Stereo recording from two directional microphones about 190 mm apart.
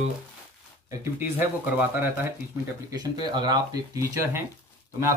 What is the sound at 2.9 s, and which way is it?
Speech, 20° right (ahead or behind).